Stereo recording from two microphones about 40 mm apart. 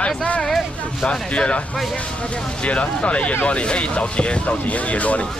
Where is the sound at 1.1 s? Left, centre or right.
Left.